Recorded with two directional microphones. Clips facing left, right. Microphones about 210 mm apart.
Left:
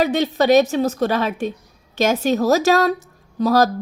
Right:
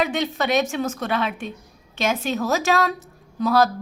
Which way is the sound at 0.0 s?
40° left (ahead or behind).